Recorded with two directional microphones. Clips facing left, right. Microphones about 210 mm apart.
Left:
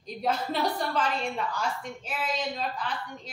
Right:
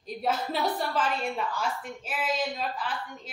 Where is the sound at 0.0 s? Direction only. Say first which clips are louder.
Even; 5° right (ahead or behind).